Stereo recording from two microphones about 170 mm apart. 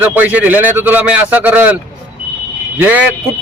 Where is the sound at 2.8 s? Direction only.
10° right (ahead or behind).